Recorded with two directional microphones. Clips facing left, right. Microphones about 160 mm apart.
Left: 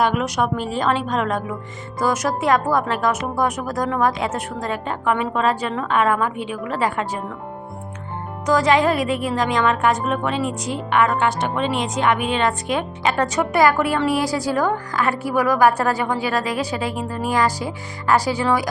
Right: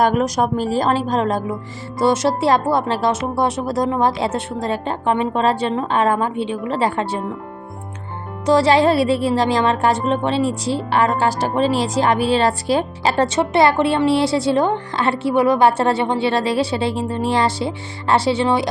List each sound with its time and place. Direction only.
0.0 s a woman's voice: 40° right (ahead or behind)
8.4 s a woman's voice: 30° right (ahead or behind)